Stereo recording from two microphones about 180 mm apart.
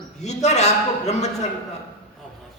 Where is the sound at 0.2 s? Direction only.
40° left (ahead or behind).